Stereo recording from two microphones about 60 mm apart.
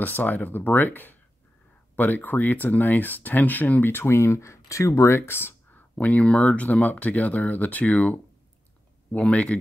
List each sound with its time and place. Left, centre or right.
0.0 s speech: left
5.1 s speech: left